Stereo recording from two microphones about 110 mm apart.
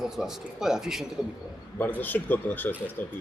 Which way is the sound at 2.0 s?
15° left (ahead or behind).